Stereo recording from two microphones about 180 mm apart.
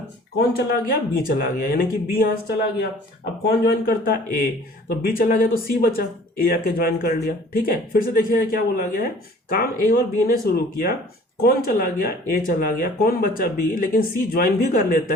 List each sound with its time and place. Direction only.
0.5 s speech: 55° left (ahead or behind)
3.7 s speech: 55° left (ahead or behind)